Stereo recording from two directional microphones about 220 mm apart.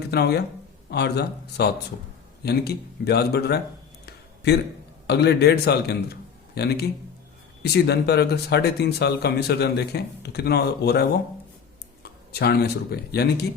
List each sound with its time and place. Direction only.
0.1 s speech: 45° left (ahead or behind)
4.0 s a sound: 50° left (ahead or behind)
5.0 s a man's voice: 50° left (ahead or behind)
12.0 s speech: 45° left (ahead or behind)